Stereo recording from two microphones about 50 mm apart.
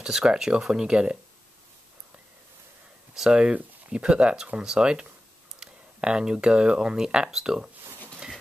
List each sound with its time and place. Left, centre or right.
0.0 s speech: centre
3.3 s speech: centre